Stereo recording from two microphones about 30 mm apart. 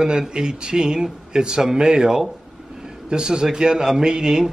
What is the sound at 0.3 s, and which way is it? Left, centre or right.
A man's voice, right.